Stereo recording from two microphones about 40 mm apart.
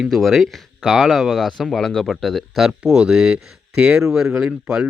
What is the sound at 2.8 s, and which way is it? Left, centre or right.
Speech, centre.